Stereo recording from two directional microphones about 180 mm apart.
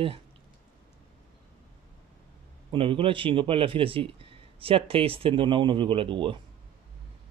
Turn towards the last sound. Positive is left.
turn(degrees=-30)  # may be behind; listen again after turning